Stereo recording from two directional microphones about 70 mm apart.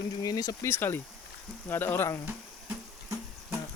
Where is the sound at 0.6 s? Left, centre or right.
Left.